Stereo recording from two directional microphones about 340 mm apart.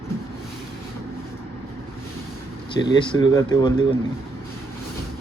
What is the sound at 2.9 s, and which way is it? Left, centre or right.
Speech, centre.